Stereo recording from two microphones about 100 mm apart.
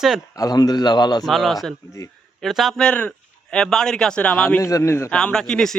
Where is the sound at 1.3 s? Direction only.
Centre (ahead or behind).